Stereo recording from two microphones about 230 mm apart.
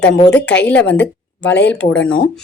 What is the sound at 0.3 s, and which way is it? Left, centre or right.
Speech, centre.